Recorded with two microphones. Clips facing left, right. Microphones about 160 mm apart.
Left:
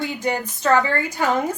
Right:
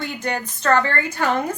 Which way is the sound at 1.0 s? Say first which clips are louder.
Even; 15° left (ahead or behind).